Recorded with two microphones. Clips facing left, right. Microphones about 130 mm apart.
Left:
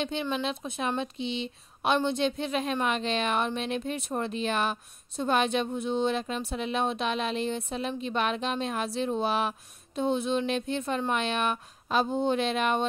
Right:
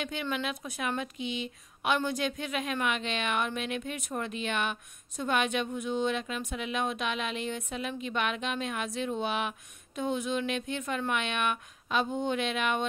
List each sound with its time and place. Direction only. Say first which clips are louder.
0.0 s a woman's voice: left 3 dB; 30° left (ahead or behind)